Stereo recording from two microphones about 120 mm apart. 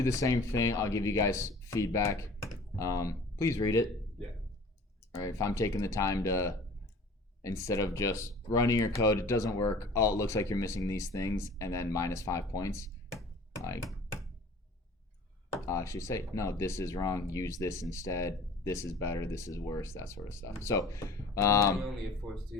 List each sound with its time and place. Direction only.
0.0 s speech: 25° left (ahead or behind)
5.1 s speech: 25° left (ahead or behind)
15.6 s speech: 25° left (ahead or behind)
22.2 s speech: centre (ahead or behind)